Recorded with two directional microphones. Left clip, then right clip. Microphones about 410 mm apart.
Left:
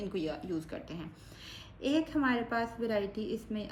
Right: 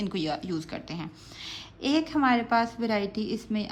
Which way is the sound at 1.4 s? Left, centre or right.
Right.